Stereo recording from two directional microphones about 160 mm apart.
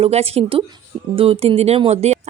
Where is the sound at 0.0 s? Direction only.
40° right (ahead or behind).